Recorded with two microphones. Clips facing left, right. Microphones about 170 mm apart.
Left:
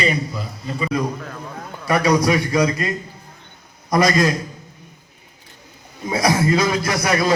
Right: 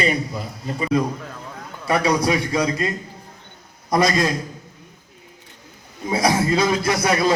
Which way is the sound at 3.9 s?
25° right (ahead or behind).